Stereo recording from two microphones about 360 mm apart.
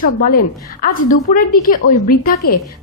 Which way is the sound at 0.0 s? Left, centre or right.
Left.